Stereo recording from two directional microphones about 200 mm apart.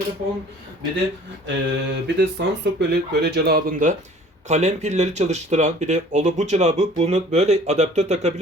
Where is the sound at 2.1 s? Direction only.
55° right (ahead or behind).